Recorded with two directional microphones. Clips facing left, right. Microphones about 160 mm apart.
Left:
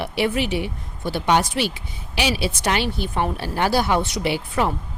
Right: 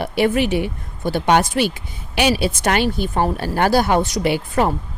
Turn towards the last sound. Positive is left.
turn(degrees=-45)  # may be behind; listen again after turning